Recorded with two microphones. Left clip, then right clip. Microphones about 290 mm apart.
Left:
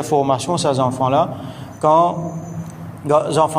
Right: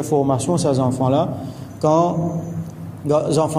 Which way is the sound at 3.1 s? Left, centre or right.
Centre.